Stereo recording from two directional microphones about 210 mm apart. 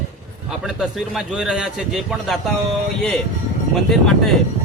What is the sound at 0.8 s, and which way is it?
A man's voice, centre (ahead or behind).